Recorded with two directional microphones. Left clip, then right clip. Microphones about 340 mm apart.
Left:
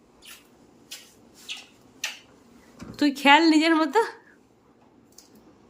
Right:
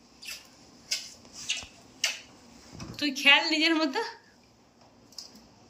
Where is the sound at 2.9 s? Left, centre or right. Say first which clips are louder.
Left 4 dB; centre.